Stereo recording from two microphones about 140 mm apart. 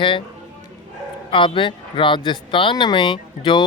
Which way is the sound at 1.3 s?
35° left (ahead or behind).